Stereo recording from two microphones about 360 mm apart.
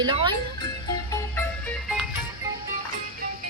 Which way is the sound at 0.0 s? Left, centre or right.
Centre.